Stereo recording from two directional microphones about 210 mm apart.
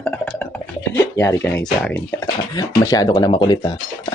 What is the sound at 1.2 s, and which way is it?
Speech, 15° left (ahead or behind).